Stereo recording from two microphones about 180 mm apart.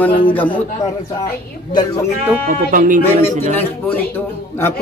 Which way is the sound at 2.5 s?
50° right (ahead or behind).